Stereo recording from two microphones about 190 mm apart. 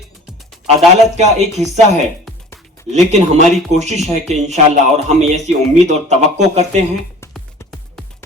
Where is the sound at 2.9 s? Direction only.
35° right (ahead or behind).